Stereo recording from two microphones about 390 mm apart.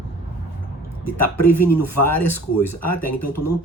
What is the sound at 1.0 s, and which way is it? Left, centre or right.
Speech, left.